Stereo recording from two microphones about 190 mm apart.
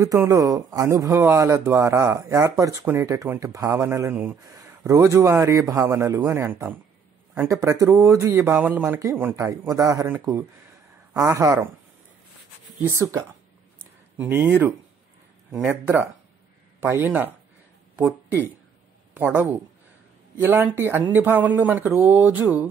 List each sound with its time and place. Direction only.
0.0 s speech: 20° right (ahead or behind)
12.9 s speech: 15° right (ahead or behind)